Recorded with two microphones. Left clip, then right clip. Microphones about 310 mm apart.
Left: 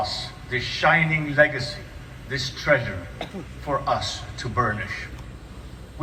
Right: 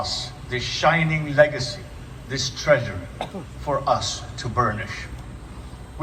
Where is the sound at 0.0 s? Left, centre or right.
Centre.